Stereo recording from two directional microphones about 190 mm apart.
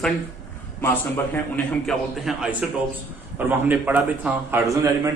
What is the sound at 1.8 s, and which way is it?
A man's voice, 5° right (ahead or behind).